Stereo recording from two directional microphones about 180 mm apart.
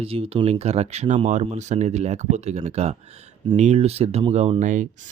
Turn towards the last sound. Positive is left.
turn(degrees=-45)  # may be behind; listen again after turning